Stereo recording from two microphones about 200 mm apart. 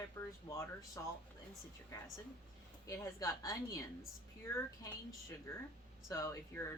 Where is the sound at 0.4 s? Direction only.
15° left (ahead or behind).